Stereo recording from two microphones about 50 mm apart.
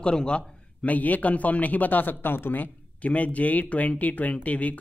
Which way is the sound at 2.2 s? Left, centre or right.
Left.